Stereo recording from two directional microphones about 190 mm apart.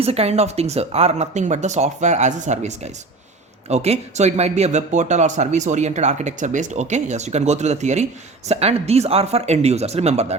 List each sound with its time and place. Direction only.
0.0 s speech: 30° right (ahead or behind)